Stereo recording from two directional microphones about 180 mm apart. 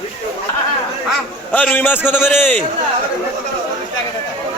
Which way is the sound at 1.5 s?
10° left (ahead or behind).